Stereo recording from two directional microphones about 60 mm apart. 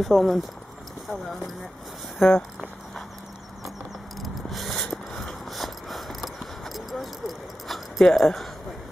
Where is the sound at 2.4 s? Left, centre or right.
Centre.